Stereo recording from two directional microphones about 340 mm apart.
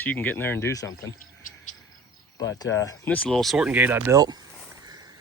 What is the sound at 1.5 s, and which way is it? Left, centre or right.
Cricket, left.